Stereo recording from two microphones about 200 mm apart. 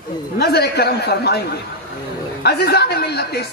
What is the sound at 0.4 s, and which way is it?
Speech, 55° left (ahead or behind).